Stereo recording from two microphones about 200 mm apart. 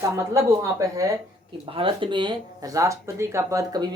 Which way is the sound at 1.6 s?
25° right (ahead or behind).